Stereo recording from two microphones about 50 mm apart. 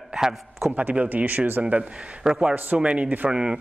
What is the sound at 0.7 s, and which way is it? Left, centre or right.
Speech, right.